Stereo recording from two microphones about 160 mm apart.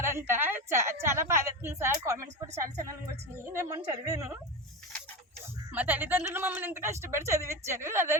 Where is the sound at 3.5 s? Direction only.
20° right (ahead or behind).